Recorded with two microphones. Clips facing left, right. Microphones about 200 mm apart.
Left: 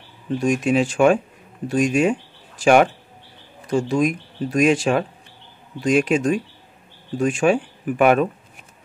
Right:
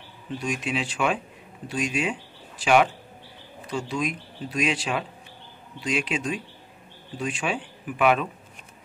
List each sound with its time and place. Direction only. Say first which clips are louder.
0.4 s speech: left 10 dB; 45° left (ahead or behind)